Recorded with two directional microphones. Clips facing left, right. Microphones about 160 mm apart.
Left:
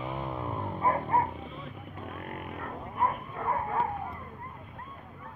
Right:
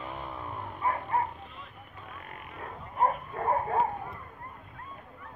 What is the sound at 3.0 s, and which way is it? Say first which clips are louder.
Bow-wow: right 3 dB; 40° right (ahead or behind).